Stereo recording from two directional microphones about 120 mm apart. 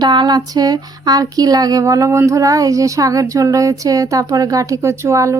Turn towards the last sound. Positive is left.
turn(degrees=-25)  # may be behind; listen again after turning